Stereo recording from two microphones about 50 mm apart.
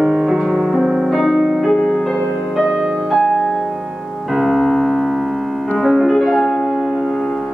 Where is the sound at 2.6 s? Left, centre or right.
Right.